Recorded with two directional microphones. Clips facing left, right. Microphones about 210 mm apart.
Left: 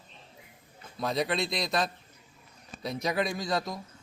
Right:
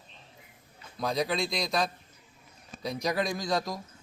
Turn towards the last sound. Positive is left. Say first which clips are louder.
# right 1 dB
turn(degrees=0)  # may be behind; listen again after turning